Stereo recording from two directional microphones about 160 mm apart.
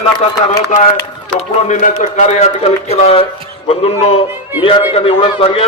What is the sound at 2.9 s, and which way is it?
A man's voice, 40° left (ahead or behind).